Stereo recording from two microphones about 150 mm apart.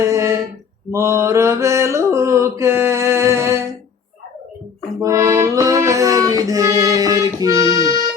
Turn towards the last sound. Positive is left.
turn(degrees=-25)  # may be behind; listen again after turning